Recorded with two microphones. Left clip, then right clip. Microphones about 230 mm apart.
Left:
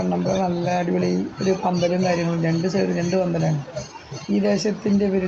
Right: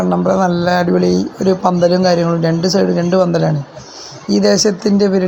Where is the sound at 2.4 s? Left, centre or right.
Right.